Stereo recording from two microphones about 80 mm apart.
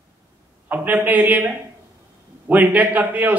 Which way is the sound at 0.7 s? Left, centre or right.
Right.